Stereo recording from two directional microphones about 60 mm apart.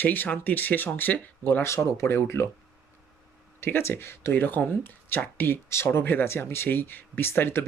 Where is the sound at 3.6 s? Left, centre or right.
Left.